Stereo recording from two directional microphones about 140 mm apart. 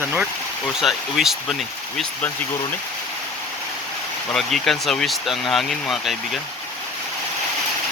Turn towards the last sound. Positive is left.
turn(degrees=0)  # may be behind; listen again after turning